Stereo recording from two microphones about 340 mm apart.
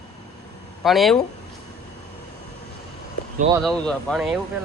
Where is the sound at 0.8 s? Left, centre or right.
Centre.